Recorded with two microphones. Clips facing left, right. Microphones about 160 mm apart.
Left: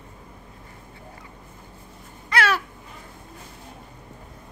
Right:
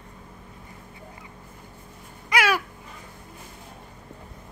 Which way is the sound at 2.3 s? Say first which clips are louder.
Even; 10° right (ahead or behind).